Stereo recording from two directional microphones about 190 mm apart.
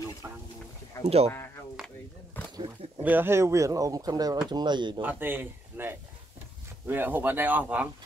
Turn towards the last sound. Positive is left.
turn(degrees=-10)  # may be behind; listen again after turning